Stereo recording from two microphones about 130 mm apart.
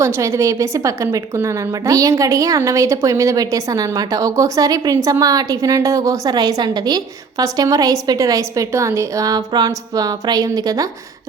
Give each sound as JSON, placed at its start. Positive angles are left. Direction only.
{"t": 0.0, "sound": "a woman's voice", "side_deg": -20}